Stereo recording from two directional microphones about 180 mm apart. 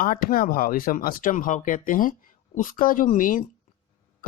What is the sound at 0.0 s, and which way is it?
Speech, 50° left (ahead or behind).